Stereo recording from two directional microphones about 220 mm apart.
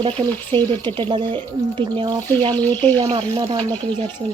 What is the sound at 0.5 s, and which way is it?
Speech, 20° right (ahead or behind).